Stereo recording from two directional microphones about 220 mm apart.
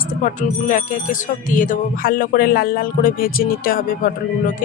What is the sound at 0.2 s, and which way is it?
Speech, 35° left (ahead or behind).